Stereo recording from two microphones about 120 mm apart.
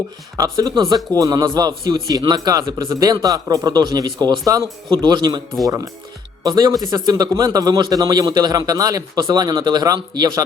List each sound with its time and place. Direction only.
0.3 s a man's voice: 30° right (ahead or behind)